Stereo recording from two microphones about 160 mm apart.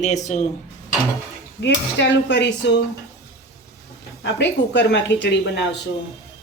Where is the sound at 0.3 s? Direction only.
50° left (ahead or behind).